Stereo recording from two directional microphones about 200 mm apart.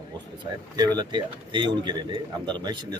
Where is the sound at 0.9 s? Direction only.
25° right (ahead or behind).